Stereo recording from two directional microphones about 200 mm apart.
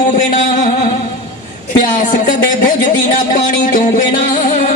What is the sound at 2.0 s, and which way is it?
Music, 40° left (ahead or behind).